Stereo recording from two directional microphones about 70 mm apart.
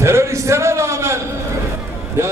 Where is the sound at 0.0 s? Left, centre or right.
Right.